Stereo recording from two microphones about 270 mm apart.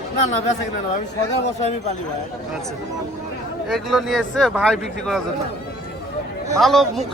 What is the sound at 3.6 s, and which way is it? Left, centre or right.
A man's voice, centre.